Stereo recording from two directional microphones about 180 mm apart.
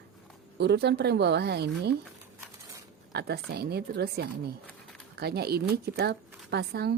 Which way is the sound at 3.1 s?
65° right (ahead or behind).